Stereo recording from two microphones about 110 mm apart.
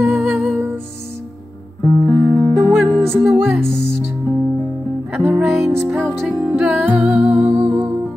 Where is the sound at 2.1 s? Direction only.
5° left (ahead or behind).